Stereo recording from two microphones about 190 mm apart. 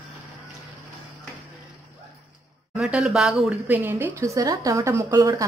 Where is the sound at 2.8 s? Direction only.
5° right (ahead or behind).